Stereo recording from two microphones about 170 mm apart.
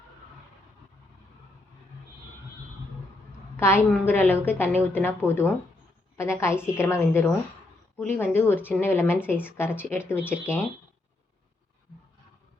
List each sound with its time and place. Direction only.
3.6 s a woman's voice: 15° left (ahead or behind)